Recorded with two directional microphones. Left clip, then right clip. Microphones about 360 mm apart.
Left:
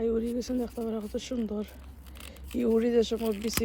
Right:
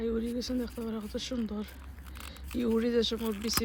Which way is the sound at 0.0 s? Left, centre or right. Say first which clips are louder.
Left 4 dB; centre.